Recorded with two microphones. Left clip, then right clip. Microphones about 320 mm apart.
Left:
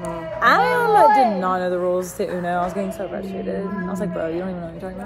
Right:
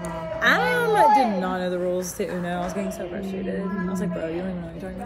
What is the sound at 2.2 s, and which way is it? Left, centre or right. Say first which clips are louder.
Speech: left 5 dB; centre.